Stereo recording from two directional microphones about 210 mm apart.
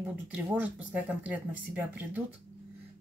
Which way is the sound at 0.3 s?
5° right (ahead or behind).